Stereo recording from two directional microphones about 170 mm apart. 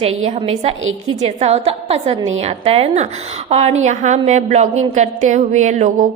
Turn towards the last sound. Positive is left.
turn(degrees=-45)  # may be behind; listen again after turning